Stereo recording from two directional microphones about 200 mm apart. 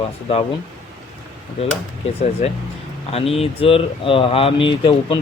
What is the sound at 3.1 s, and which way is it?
Speech, 30° left (ahead or behind).